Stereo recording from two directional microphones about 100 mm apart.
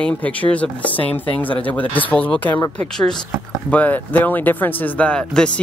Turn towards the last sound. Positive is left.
turn(degrees=10)  # may be behind; listen again after turning